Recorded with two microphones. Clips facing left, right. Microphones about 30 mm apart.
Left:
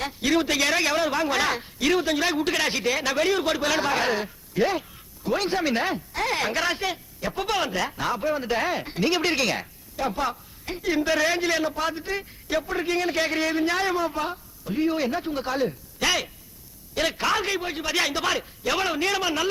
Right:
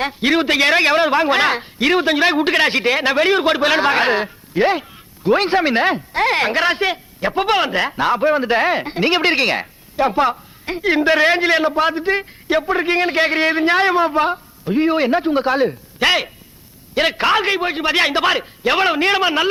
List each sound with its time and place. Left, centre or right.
0.0 s a man's voice: right